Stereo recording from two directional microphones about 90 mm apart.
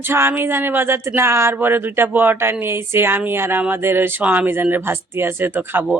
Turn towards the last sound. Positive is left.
turn(degrees=-25)  # may be behind; listen again after turning